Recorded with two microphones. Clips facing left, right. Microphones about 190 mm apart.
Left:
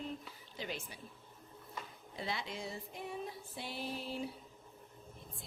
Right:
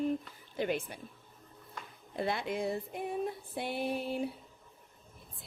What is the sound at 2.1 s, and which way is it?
Female singing, 55° right (ahead or behind).